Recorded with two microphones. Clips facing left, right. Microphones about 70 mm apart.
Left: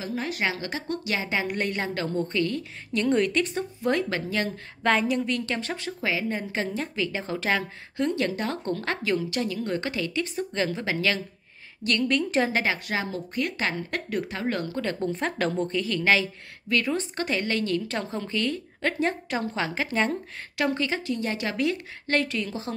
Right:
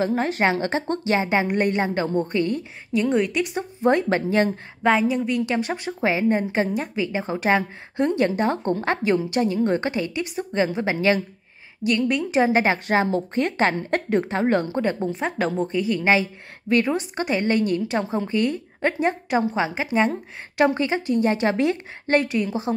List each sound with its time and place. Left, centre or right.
0.0 s a woman's voice: right
2.9 s speech: centre
3.8 s a woman's voice: right
5.1 s a woman's voice: centre
11.8 s speech: centre
12.6 s a woman's voice: right
15.0 s a woman's voice: centre